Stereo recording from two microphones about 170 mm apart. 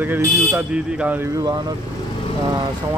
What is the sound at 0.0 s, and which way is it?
Speech, 10° right (ahead or behind).